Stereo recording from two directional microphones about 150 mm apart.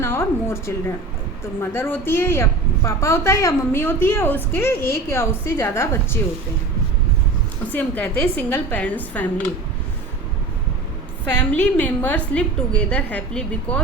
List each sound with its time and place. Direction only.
0.0 s a sound: 15° left (ahead or behind)
1.6 s a woman's voice: 15° left (ahead or behind)
7.8 s a woman's voice: 10° left (ahead or behind)
11.3 s a woman's voice: 10° left (ahead or behind)